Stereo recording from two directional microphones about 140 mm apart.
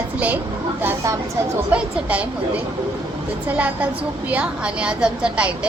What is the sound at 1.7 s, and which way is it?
A woman's voice, 10° right (ahead or behind).